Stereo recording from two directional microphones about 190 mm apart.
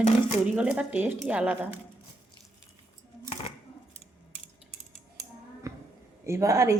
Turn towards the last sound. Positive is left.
turn(degrees=-15)  # may be behind; listen again after turning